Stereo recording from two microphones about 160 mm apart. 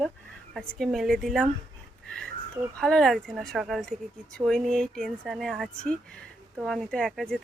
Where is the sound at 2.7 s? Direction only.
5° left (ahead or behind).